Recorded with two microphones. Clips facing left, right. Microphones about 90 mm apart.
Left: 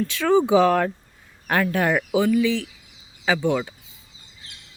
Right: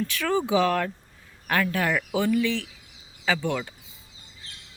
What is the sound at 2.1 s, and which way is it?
Speech, 5° left (ahead or behind).